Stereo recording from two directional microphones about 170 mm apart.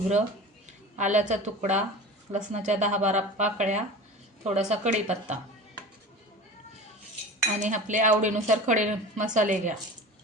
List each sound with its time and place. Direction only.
0.9 s a woman's voice: 45° right (ahead or behind)
7.6 s a woman's voice: 45° right (ahead or behind)